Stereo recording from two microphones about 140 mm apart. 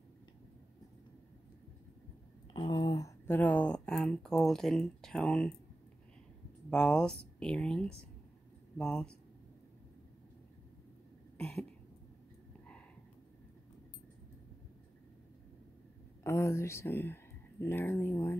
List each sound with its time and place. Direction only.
2.5 s a sound: 30° left (ahead or behind)
3.3 s speech: 10° left (ahead or behind)
6.7 s speech: 5° left (ahead or behind)
11.3 s cough: 10° left (ahead or behind)
16.3 s speech: 20° left (ahead or behind)